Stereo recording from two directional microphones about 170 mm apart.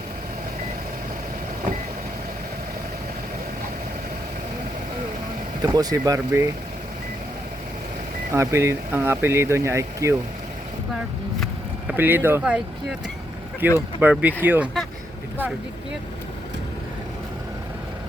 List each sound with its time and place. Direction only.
5.6 s speech: 20° right (ahead or behind)
8.3 s speech: 15° right (ahead or behind)
11.9 s speech: 10° right (ahead or behind)